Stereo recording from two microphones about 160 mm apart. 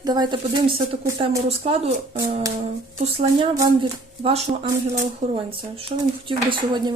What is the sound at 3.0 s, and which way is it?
Speech, 40° right (ahead or behind).